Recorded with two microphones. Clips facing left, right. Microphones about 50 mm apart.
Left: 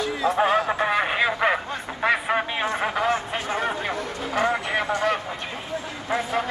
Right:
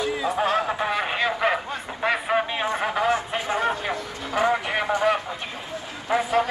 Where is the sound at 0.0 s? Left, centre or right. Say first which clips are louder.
Left 1 dB; centre.